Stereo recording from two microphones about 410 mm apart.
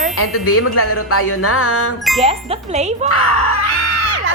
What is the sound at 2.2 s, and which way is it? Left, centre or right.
Speech, centre.